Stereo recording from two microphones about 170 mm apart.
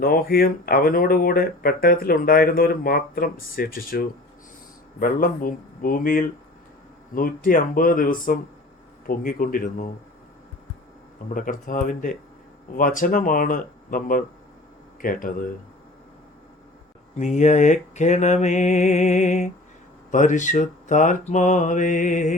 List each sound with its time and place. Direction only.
0.0 s speech: 60° left (ahead or behind)
11.3 s mantra: 50° left (ahead or behind)
15.0 s speech: 55° left (ahead or behind)
17.2 s mantra: 45° left (ahead or behind)